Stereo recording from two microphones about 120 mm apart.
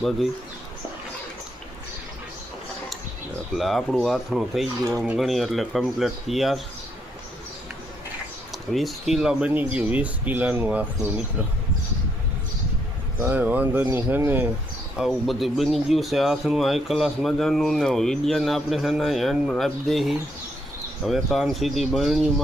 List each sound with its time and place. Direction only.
3.6 s speech: centre (ahead or behind)
4.9 s speech: 25° right (ahead or behind)
5.1 s speech: centre (ahead or behind)
8.7 s speech: centre (ahead or behind)
13.1 s speech: 15° right (ahead or behind)
14.9 s speech: centre (ahead or behind)